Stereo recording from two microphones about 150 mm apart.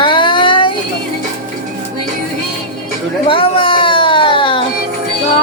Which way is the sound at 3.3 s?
35° left (ahead or behind).